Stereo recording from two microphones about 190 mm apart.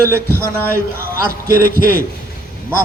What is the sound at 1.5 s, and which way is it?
Speech, 50° right (ahead or behind).